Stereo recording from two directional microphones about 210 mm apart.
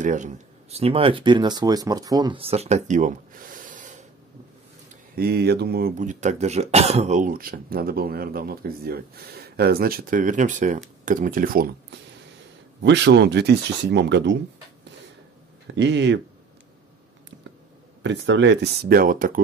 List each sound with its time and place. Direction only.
0.0 s speech: 35° right (ahead or behind)
5.1 s speech: 50° right (ahead or behind)
12.8 s speech: 55° right (ahead or behind)
15.7 s speech: 55° right (ahead or behind)
18.0 s speech: 55° right (ahead or behind); by 19.4 s 40° right (ahead or behind)